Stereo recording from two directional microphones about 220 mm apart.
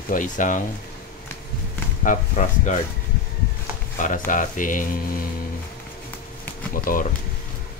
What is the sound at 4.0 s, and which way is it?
Speech, 35° left (ahead or behind).